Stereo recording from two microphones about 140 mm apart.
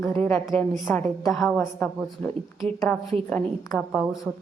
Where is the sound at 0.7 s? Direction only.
5° left (ahead or behind).